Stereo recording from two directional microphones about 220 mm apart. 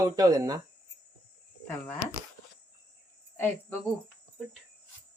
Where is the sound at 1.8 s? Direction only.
10° left (ahead or behind).